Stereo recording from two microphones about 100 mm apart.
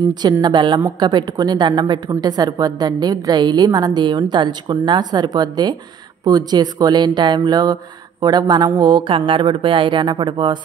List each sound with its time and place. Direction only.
0.1 s a woman's voice: 45° right (ahead or behind)